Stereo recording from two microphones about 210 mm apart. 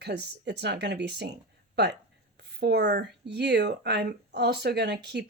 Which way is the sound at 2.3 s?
50° right (ahead or behind).